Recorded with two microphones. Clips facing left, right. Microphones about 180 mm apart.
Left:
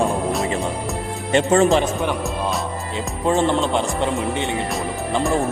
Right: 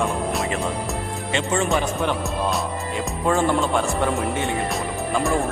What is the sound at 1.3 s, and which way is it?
Speech, 45° left (ahead or behind).